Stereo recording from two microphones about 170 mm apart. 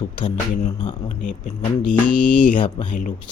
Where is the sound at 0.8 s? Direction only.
30° left (ahead or behind).